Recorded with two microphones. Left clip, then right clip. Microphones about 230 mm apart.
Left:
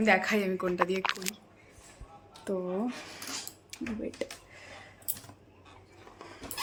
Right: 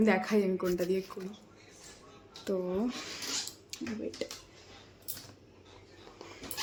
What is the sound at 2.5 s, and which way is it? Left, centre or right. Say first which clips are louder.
Speech: even; centre.